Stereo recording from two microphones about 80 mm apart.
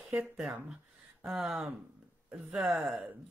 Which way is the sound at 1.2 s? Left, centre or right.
Centre.